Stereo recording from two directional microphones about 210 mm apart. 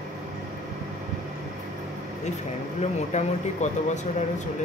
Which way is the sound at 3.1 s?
35° left (ahead or behind).